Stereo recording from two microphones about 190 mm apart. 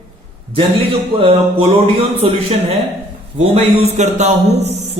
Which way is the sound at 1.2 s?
30° right (ahead or behind).